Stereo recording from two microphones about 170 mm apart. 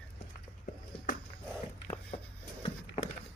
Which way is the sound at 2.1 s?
45° left (ahead or behind).